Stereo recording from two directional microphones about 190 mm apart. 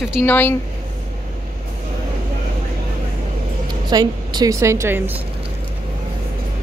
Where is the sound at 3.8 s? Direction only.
20° right (ahead or behind).